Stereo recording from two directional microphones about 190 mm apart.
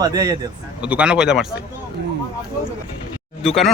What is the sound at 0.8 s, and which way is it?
Speech, 5° right (ahead or behind).